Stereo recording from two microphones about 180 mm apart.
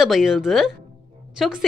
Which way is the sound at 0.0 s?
Centre (ahead or behind).